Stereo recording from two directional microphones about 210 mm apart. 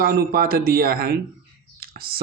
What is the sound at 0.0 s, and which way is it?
Speech, 45° right (ahead or behind).